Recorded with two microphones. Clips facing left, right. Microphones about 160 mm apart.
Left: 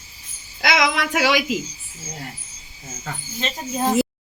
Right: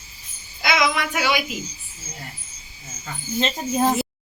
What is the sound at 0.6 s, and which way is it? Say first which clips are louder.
Speech: left 1 dB; 90° left.